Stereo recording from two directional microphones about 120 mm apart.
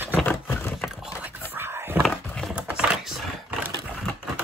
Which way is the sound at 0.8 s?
5° right (ahead or behind).